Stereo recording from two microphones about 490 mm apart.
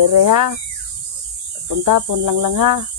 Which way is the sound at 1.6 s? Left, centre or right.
Right.